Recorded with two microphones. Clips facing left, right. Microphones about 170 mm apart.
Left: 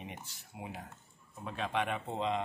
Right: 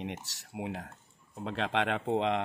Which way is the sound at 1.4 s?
85° right.